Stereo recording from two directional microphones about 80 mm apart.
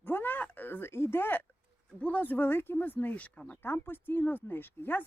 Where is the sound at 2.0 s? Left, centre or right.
Centre.